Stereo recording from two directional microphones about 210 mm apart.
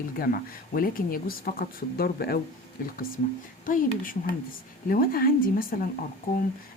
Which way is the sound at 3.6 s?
40° left (ahead or behind).